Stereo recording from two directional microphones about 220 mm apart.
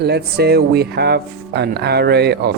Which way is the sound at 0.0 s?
45° right (ahead or behind).